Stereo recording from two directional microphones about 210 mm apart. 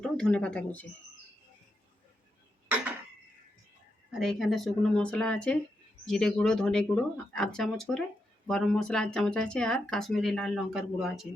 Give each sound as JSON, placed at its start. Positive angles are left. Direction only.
{"t": 0.0, "sound": "speech", "side_deg": 5}
{"t": 4.1, "sound": "speech", "side_deg": 0}